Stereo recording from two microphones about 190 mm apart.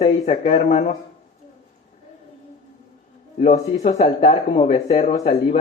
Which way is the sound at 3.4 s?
35° left (ahead or behind).